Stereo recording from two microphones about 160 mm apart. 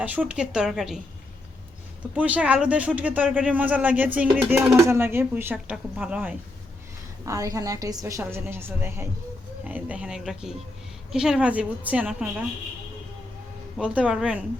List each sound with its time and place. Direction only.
0.0 s a woman's voice: 10° right (ahead or behind)
2.1 s speech: 10° right (ahead or behind)
7.3 s a woman's voice: 20° right (ahead or behind)
13.7 s speech: 5° right (ahead or behind)